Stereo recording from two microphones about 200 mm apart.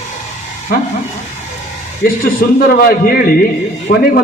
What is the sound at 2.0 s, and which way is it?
A man's voice, 45° left (ahead or behind).